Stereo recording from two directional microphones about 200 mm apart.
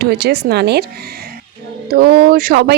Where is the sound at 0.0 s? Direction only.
55° right (ahead or behind).